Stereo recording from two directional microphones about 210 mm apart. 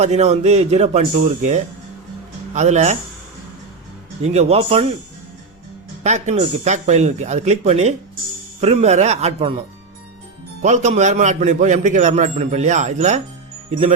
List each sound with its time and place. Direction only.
0.0 s a man's voice: 30° right (ahead or behind)
4.2 s speech: 30° right (ahead or behind)
6.0 s a man's voice: 35° right (ahead or behind)